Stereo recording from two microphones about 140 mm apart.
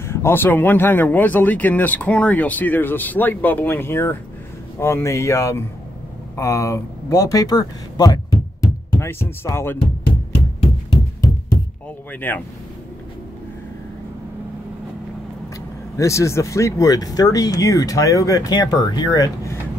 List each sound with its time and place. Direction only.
0.0 s speech: 20° left (ahead or behind)
12.1 s speech: 15° left (ahead or behind)
16.0 s speech: 20° left (ahead or behind)